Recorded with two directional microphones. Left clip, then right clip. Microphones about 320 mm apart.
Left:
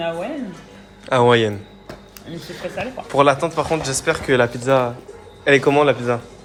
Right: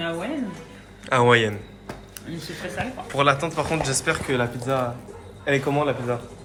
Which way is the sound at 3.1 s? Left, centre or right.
Centre.